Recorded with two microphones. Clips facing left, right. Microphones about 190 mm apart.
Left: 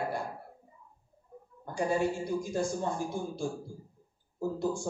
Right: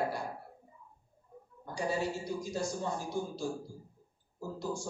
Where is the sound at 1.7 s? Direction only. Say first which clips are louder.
Left 4 dB; 55° left (ahead or behind).